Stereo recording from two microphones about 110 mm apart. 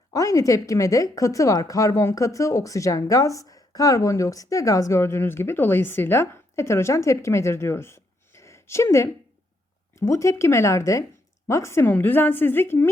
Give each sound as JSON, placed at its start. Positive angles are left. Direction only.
{"t": 0.1, "sound": "speech", "side_deg": 30}